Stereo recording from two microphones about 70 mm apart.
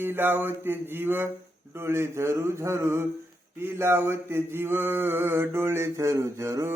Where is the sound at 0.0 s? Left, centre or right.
Right.